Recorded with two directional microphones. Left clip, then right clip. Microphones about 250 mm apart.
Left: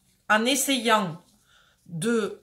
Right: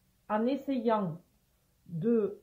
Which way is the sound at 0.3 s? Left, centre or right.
Centre.